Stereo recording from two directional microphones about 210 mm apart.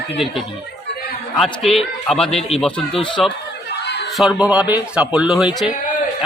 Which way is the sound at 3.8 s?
55° left (ahead or behind).